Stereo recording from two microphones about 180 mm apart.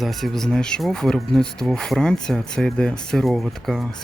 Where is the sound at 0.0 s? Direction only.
Centre (ahead or behind).